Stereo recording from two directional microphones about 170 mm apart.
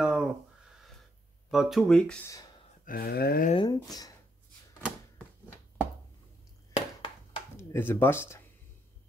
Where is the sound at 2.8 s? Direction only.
60° left (ahead or behind).